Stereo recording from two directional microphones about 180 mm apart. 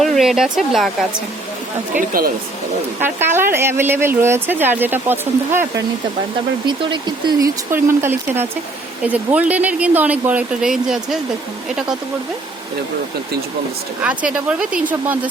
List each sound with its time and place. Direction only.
0.0 s speech: centre (ahead or behind)
2.0 s speech: 55° right (ahead or behind)
3.0 s speech: 10° right (ahead or behind)
6.7 s speech: 25° right (ahead or behind); by 11.2 s centre (ahead or behind)
14.0 s speech: 5° right (ahead or behind)